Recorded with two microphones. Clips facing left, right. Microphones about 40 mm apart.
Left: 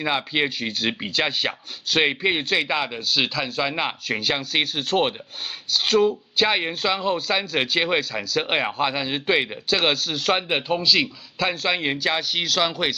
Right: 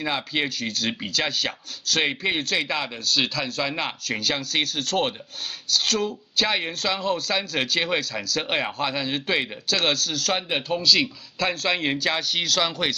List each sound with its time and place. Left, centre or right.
0.0 s speech: centre